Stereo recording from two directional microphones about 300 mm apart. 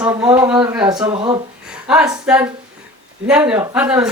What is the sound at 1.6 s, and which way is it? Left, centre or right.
A man's voice, centre.